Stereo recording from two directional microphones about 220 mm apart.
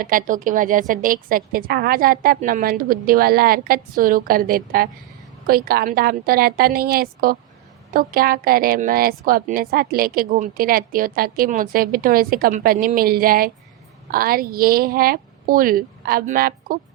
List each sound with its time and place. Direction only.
0.0 s a woman's voice: 40° right (ahead or behind)